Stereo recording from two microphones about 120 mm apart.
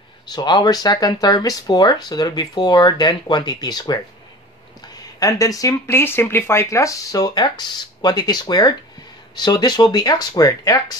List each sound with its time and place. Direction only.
0.3 s speech: 35° left (ahead or behind)